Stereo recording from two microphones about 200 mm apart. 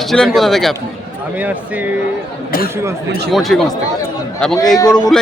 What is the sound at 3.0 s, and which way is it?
Speech, 55° right (ahead or behind).